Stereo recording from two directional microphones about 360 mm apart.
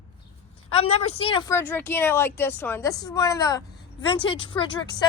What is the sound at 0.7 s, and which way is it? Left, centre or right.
Speech, centre.